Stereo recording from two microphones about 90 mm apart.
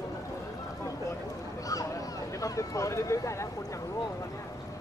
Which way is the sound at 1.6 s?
40° left (ahead or behind).